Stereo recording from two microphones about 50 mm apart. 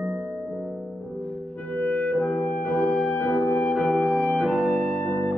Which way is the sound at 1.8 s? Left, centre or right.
Left.